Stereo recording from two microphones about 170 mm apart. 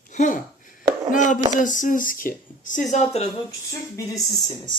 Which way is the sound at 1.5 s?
50° left (ahead or behind).